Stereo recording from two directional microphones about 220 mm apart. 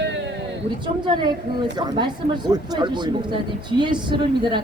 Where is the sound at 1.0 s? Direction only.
20° right (ahead or behind).